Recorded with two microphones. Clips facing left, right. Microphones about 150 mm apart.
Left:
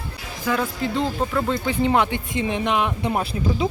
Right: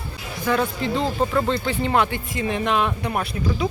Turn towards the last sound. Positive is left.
turn(degrees=25)  # may be behind; listen again after turning